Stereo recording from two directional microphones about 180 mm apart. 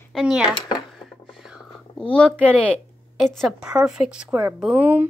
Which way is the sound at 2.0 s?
5° left (ahead or behind).